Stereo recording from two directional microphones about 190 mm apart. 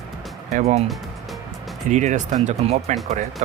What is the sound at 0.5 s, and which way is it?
Speech, 35° right (ahead or behind).